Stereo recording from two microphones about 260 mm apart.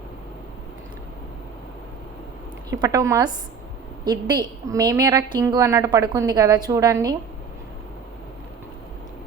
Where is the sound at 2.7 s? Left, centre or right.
Centre.